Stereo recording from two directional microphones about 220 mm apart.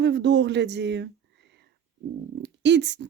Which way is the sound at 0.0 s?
55° right (ahead or behind).